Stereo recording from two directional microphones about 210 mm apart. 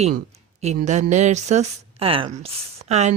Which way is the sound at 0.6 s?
35° right (ahead or behind).